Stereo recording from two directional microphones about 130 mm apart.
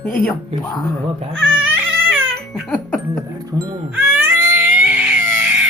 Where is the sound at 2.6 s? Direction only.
10° left (ahead or behind).